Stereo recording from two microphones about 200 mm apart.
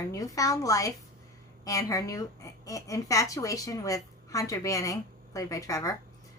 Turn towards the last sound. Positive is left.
turn(degrees=15)  # may be behind; listen again after turning